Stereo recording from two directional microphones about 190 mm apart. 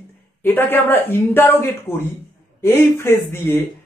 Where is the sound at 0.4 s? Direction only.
10° left (ahead or behind).